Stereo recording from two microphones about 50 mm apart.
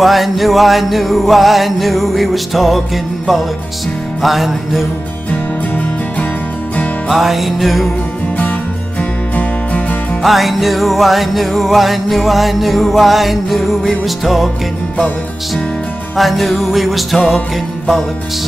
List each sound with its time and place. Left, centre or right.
0.0 s music: centre
5.3 s music: left
7.1 s music: centre
9.3 s music: left
10.2 s music: centre
16.2 s music: centre